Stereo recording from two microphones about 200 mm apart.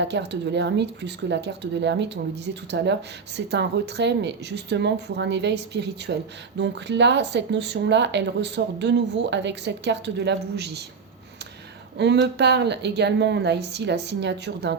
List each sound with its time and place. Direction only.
0.0 s speech: 60° right (ahead or behind)
11.9 s speech: 60° right (ahead or behind)